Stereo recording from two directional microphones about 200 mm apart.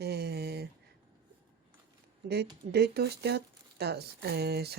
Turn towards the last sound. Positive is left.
turn(degrees=-50)  # may be behind; listen again after turning